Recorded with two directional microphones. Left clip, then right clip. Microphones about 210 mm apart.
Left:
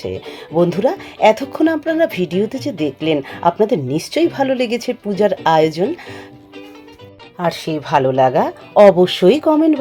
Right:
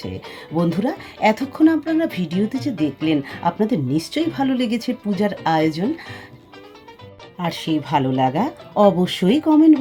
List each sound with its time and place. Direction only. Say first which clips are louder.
0.0 s speech: left 6 dB; 30° left (ahead or behind)
7.7 s speech: left 3 dB; 25° left (ahead or behind)